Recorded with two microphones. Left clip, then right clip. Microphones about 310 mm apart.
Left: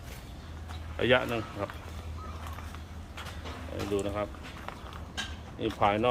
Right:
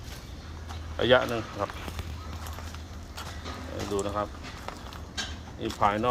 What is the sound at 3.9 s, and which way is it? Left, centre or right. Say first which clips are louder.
Speech: right 2 dB; centre.